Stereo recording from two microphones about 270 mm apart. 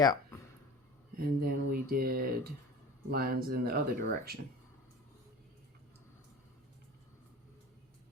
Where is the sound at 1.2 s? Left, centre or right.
Right.